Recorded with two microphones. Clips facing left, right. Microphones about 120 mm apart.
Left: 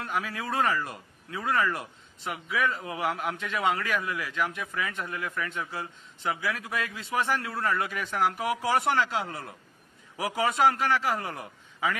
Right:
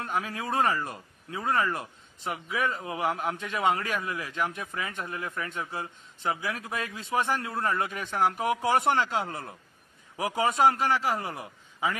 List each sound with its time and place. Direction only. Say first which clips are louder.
0.0 s a man's voice: right 1 dB; 25° right (ahead or behind)
3.5 s a man's voice: even; 30° right (ahead or behind)